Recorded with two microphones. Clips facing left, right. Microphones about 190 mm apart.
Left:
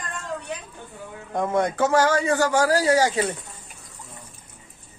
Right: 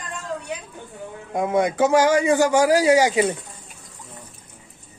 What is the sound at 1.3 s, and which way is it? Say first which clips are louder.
A man's voice: right 2 dB; 10° right (ahead or behind).